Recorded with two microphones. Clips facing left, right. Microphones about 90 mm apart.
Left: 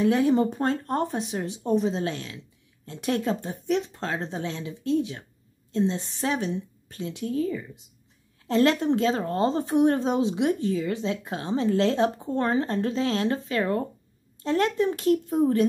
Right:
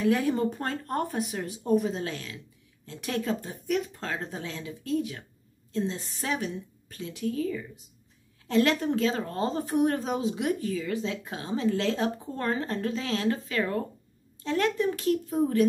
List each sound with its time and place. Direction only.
0.0 s a woman's voice: 25° left (ahead or behind)